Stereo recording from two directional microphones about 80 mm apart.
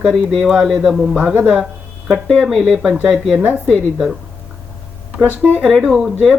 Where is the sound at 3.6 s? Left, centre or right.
Centre.